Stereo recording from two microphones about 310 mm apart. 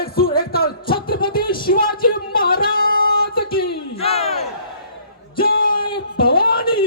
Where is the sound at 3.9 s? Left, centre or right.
Centre.